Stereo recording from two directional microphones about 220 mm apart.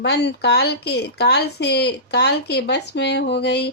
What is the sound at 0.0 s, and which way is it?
Speech, 50° left (ahead or behind).